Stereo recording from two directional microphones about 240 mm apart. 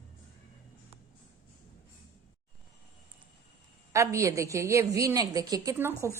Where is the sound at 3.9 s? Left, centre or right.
Centre.